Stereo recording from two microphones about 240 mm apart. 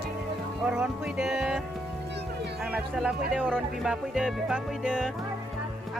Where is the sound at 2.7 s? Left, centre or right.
Centre.